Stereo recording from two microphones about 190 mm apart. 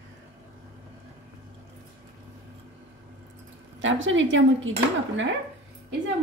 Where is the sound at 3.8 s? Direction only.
90° right.